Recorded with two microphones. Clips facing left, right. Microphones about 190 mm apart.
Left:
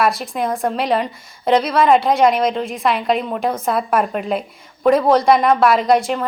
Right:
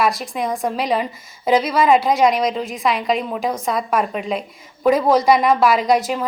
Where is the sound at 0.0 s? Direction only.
Centre (ahead or behind).